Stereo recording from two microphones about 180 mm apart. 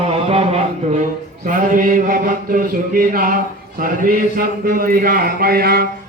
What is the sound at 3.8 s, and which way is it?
A man's voice, 50° right (ahead or behind).